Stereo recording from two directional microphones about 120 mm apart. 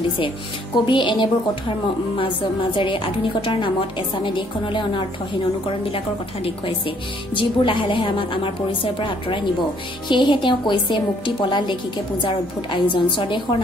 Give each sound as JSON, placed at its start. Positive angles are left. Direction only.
{"t": 0.8, "sound": "a woman's voice", "side_deg": 40}